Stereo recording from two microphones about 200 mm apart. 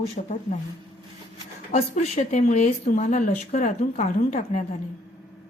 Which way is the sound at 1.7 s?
35° left (ahead or behind).